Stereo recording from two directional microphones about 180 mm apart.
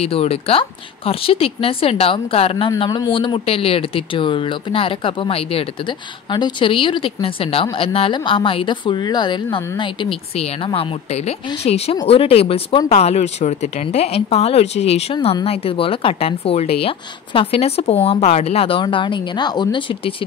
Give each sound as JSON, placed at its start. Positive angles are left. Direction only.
{"t": 0.0, "sound": "speech", "side_deg": 35}